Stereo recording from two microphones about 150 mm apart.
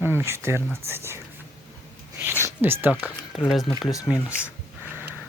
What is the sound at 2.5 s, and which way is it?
Speech, 15° right (ahead or behind).